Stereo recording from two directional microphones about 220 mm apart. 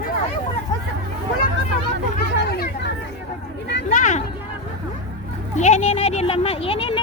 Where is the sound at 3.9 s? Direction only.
35° left (ahead or behind).